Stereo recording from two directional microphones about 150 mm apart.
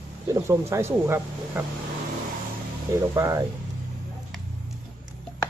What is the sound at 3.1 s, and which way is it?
Speech, 20° right (ahead or behind).